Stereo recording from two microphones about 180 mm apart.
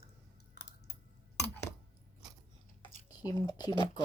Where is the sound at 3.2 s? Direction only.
20° left (ahead or behind).